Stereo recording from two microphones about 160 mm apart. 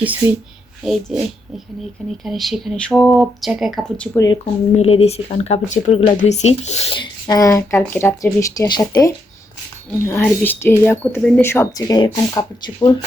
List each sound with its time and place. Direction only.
0.0 s speech: 10° right (ahead or behind); by 4.1 s 5° left (ahead or behind)
4.1 s speech: 20° left (ahead or behind)
4.7 s speech: 40° left (ahead or behind); by 9.1 s 25° left (ahead or behind)
10.1 s speech: 10° left (ahead or behind)